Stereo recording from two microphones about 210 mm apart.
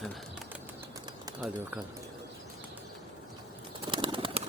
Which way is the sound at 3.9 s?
25° right (ahead or behind).